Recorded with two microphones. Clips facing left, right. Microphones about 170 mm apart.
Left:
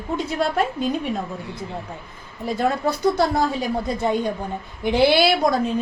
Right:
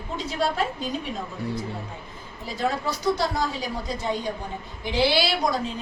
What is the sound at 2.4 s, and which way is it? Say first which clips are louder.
A woman's voice: left 5 dB; 55° left (ahead or behind).